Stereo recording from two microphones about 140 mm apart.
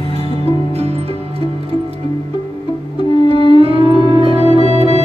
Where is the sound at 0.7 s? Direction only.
50° right (ahead or behind).